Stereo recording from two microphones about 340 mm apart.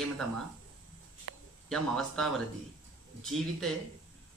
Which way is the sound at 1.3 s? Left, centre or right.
Right.